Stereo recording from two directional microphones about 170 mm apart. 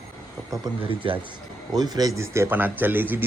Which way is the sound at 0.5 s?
25° right (ahead or behind).